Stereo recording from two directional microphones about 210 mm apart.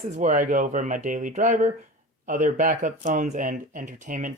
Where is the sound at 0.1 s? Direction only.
35° right (ahead or behind).